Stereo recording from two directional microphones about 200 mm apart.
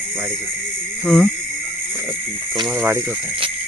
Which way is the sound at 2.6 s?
10° right (ahead or behind).